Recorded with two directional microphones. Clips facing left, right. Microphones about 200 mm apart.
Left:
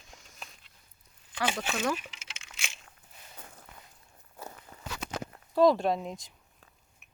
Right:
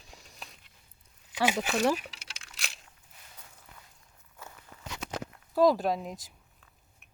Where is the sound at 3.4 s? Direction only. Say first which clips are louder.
Left 7 dB; 55° left (ahead or behind).